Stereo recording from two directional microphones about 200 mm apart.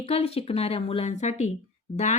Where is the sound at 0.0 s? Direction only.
30° left (ahead or behind).